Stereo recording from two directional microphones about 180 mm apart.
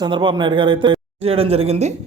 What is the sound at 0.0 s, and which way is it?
A man's voice, 25° right (ahead or behind).